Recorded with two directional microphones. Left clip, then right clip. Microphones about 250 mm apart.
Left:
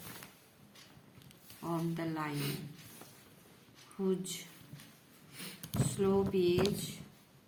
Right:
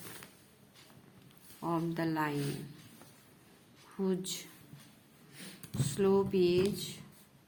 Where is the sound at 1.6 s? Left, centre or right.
Right.